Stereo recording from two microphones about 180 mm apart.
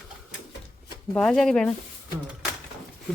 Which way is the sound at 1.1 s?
5° left (ahead or behind).